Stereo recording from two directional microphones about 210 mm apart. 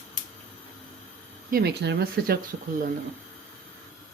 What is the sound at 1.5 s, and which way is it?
Speech, 50° right (ahead or behind).